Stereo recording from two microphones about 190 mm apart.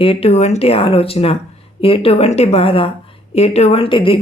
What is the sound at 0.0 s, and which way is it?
A woman's voice, 30° left (ahead or behind).